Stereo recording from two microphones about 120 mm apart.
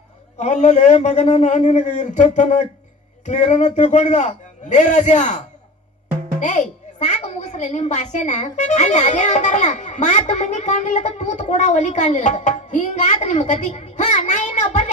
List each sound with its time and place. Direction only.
0.3 s a woman's voice: 80° left
6.4 s a woman's voice: 85° left